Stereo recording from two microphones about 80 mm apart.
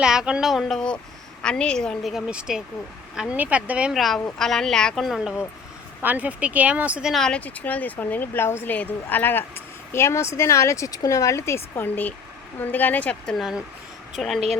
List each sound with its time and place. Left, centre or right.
0.0 s speech: centre
1.4 s a woman's voice: centre
2.1 s speech: centre
3.9 s speech: centre
5.0 s speech: centre
6.0 s speech: right
7.1 s a woman's voice: centre
7.4 s speech: centre
14.2 s speech: centre